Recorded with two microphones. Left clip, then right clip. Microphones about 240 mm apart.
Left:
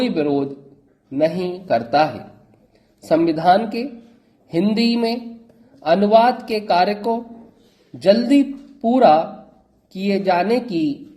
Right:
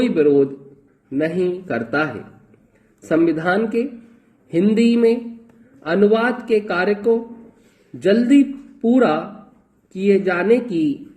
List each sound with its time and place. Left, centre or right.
0.0 s a man's voice: centre